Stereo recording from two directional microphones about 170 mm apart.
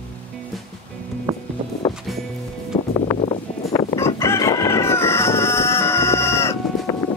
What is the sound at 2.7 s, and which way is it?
Music, 30° left (ahead or behind).